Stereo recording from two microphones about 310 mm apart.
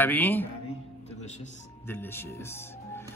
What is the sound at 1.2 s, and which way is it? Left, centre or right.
Speech, left.